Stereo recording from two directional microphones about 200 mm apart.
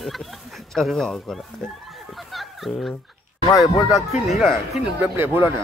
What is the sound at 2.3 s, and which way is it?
Fowl, centre (ahead or behind).